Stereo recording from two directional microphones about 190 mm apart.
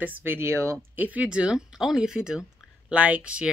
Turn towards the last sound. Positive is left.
turn(degrees=-5)  # may be behind; listen again after turning